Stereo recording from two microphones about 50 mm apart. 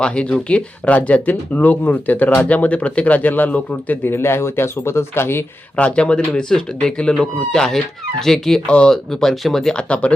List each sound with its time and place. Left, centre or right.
0.0 s speech: left
4.1 s speech: left
5.7 s speech: left
7.5 s speech: centre
8.6 s speech: centre
9.2 s speech: centre
9.9 s speech: left